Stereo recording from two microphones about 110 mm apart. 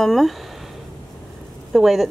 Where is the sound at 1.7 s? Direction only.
5° right (ahead or behind).